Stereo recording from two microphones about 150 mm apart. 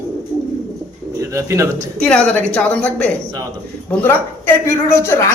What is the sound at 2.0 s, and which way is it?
A man's voice, 10° left (ahead or behind).